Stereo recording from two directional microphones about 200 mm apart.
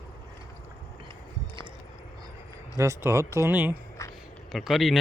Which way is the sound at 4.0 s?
15° left (ahead or behind).